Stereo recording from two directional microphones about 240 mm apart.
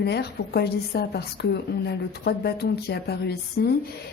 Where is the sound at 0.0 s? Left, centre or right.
Left.